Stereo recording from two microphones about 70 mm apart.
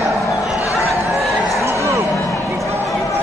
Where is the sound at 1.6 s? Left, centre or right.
Right.